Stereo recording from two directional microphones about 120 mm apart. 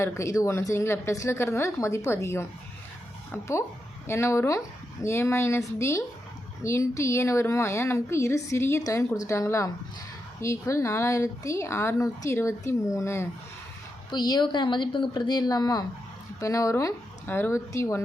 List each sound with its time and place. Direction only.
0.0 s a woman's voice: 25° left (ahead or behind)
14.1 s a woman's voice: 35° left (ahead or behind)